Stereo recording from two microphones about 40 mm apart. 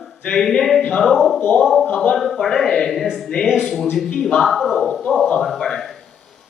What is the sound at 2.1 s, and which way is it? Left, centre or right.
Speech, centre.